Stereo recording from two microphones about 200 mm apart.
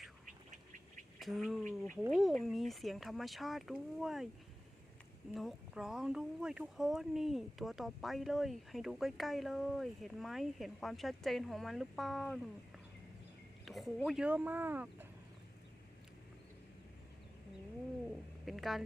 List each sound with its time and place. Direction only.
0.3 s bird: 40° right (ahead or behind)
1.2 s speech: centre (ahead or behind)
5.3 s speech: centre (ahead or behind)
18.4 s speech: centre (ahead or behind)